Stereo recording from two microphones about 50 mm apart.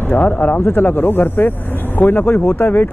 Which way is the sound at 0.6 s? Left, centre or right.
Left.